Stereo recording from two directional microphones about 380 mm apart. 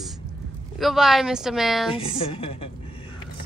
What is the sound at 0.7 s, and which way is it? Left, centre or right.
Speech, centre.